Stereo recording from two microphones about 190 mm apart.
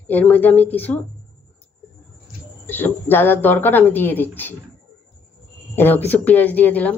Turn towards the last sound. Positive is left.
turn(degrees=10)  # may be behind; listen again after turning